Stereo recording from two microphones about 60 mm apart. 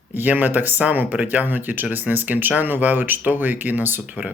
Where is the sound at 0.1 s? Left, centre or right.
Right.